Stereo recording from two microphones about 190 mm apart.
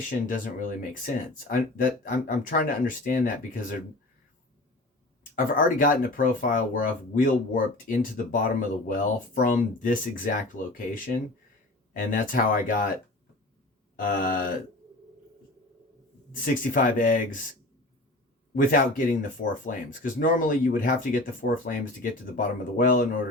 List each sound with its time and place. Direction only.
0.3 s speech: 45° left (ahead or behind)
5.3 s speech: 45° left (ahead or behind)
11.9 s speech: 45° left (ahead or behind)
14.0 s speech: 50° left (ahead or behind)
16.3 s speech: 45° left (ahead or behind)
18.5 s speech: 45° left (ahead or behind)